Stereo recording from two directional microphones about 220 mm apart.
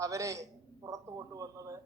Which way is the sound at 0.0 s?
15° right (ahead or behind).